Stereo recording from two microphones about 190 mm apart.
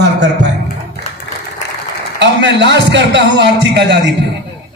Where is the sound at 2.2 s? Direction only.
65° right (ahead or behind).